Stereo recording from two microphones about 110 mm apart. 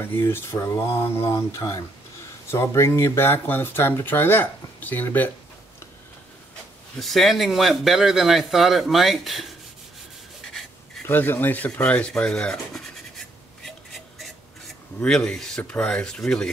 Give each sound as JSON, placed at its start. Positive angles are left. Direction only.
{"t": 0.0, "sound": "speech", "side_deg": 20}
{"t": 7.0, "sound": "a man's voice", "side_deg": 0}
{"t": 11.1, "sound": "rub", "side_deg": 20}
{"t": 13.9, "sound": "a sound", "side_deg": 0}
{"t": 15.0, "sound": "speech", "side_deg": 5}